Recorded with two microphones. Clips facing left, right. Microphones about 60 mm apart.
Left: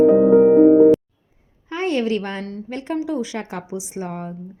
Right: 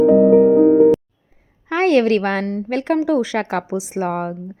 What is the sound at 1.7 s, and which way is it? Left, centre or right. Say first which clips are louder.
A woman's voice: right 7 dB; right.